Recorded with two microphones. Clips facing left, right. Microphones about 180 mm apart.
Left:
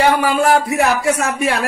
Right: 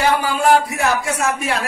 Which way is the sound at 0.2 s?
65° left (ahead or behind).